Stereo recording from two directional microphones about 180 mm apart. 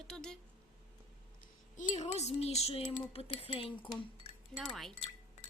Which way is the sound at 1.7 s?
40° left (ahead or behind).